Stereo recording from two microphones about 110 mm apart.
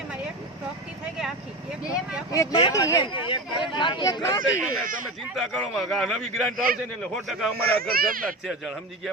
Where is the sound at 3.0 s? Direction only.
50° left (ahead or behind).